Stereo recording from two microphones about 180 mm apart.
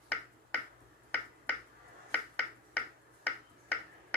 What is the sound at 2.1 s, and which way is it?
Finger snapping, 5° left (ahead or behind).